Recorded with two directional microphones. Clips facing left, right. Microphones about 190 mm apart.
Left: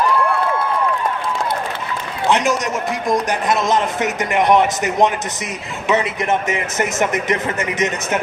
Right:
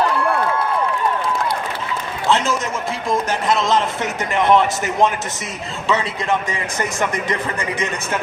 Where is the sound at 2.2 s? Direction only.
15° left (ahead or behind).